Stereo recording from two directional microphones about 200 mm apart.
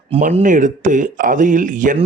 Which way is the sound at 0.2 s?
40° right (ahead or behind).